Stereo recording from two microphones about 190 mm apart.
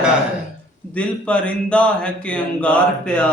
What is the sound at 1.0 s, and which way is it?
A man's voice, 5° left (ahead or behind).